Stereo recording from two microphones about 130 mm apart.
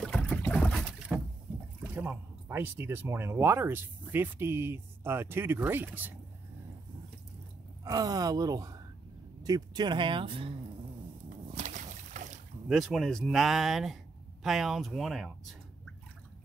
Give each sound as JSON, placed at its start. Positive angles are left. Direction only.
{"t": 0.0, "sound": "boat", "side_deg": 10}
{"t": 1.8, "sound": "speech", "side_deg": -15}
{"t": 7.8, "sound": "speech", "side_deg": -30}
{"t": 11.2, "sound": "boat", "side_deg": -70}
{"t": 12.6, "sound": "speech", "side_deg": 0}